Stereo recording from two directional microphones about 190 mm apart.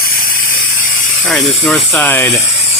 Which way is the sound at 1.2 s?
Centre (ahead or behind).